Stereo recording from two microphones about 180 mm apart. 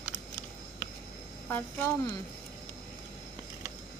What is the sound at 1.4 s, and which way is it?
Speech, 10° left (ahead or behind).